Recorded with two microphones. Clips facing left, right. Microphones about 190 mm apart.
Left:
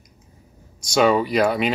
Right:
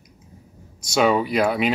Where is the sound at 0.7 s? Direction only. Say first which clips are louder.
Left 1 dB; 5° right (ahead or behind).